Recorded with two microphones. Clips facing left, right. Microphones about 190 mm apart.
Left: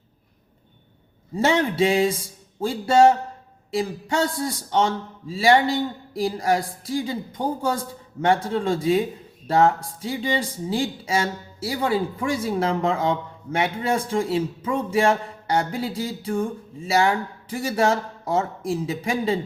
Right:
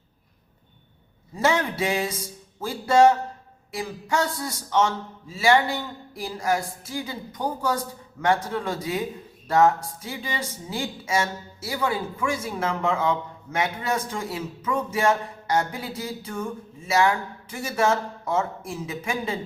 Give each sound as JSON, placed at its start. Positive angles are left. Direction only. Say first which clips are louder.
{"t": 1.4, "sound": "a man's voice", "louder": "left 4 dB", "side_deg": 30}